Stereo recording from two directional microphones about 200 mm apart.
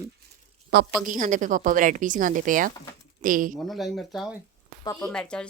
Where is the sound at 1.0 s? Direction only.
40° right (ahead or behind).